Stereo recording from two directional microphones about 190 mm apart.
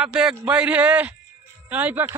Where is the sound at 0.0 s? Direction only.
5° right (ahead or behind).